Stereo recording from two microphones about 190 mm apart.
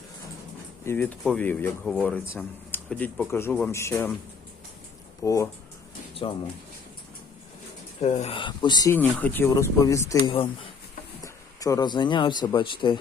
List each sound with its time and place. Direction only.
0.9 s speech: 10° left (ahead or behind)
5.2 s speech: 15° left (ahead or behind)
8.0 s speech: 35° left (ahead or behind)
8.4 s speech: 25° left (ahead or behind)
9.0 s speech: 10° left (ahead or behind)
10.3 s speech: 30° left (ahead or behind)
11.2 s speech: 15° left (ahead or behind)